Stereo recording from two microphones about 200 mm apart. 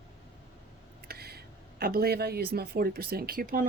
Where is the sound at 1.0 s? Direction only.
50° right (ahead or behind).